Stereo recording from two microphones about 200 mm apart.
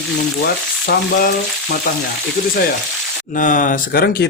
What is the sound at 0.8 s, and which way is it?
Speech, 45° left (ahead or behind).